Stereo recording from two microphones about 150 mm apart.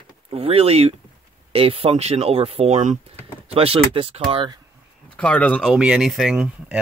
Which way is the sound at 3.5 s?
40° right (ahead or behind).